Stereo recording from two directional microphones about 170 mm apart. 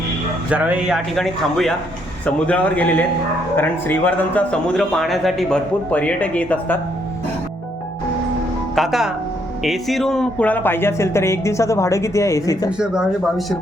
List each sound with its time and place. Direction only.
0.5 s a man's voice: 10° right (ahead or behind); by 6.7 s 10° left (ahead or behind)
8.7 s a man's voice: centre (ahead or behind); by 12.7 s 20° left (ahead or behind)
12.8 s a man's voice: 5° right (ahead or behind)